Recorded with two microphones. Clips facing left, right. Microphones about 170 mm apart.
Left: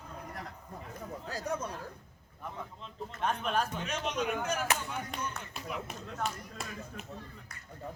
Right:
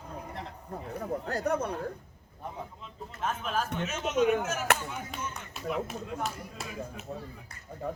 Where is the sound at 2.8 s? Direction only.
5° right (ahead or behind).